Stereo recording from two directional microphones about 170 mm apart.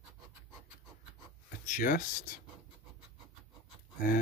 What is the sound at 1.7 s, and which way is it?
Speech, 50° left (ahead or behind).